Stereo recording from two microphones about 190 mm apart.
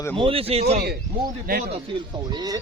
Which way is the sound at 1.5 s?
50° right (ahead or behind).